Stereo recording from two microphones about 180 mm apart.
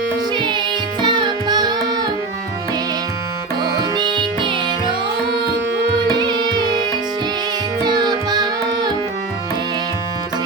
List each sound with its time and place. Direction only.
0.3 s music: 25° right (ahead or behind)
1.0 s carnatic music: 25° right (ahead or behind)
3.6 s music: 25° right (ahead or behind)
6.1 s music: 25° right (ahead or behind)
7.9 s carnatic music: 25° right (ahead or behind)